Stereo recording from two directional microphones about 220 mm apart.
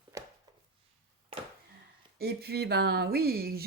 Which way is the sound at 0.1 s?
15° right (ahead or behind).